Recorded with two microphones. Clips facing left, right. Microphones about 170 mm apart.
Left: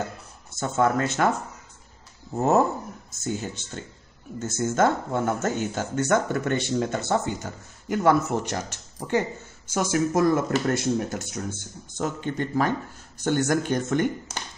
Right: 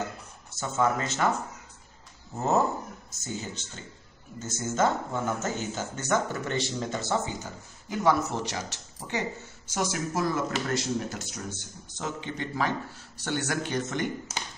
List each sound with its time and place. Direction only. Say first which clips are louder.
0.6 s speech: left 4 dB; 55° left (ahead or behind)
3.3 s speech: left 6 dB; 55° left (ahead or behind)